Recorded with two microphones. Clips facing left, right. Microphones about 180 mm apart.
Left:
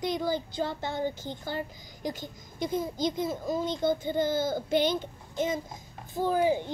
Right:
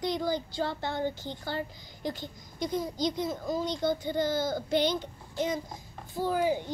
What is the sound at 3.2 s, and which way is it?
Speech, 25° left (ahead or behind).